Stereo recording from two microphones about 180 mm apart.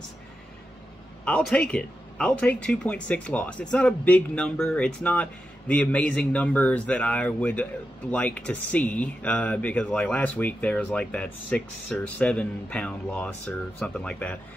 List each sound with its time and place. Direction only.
1.2 s speech: 5° left (ahead or behind)